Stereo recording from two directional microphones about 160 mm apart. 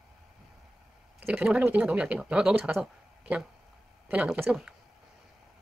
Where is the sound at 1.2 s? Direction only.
5° right (ahead or behind).